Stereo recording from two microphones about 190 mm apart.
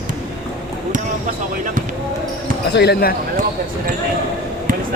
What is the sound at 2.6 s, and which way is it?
Speech, 60° left (ahead or behind).